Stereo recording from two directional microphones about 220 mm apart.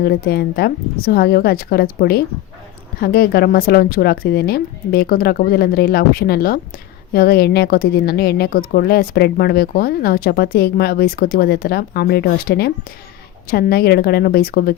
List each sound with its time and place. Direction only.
0.0 s a woman's voice: 45° left (ahead or behind)